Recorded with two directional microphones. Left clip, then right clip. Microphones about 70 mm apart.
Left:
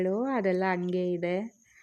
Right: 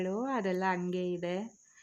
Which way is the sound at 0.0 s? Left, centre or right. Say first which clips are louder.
Left 5 dB; left.